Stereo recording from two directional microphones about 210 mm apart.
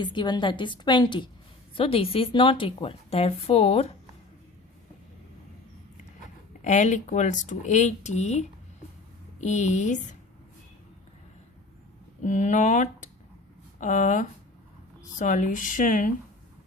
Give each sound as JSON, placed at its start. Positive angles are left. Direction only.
{"t": 0.0, "sound": "a woman's voice", "side_deg": 20}
{"t": 6.6, "sound": "speech", "side_deg": 35}
{"t": 12.2, "sound": "speech", "side_deg": 35}